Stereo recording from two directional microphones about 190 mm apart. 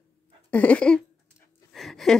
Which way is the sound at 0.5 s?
5° left (ahead or behind).